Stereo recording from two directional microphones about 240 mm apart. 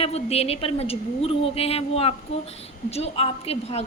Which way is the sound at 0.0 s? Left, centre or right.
Left.